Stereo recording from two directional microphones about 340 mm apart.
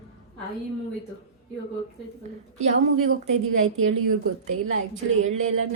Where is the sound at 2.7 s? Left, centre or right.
Right.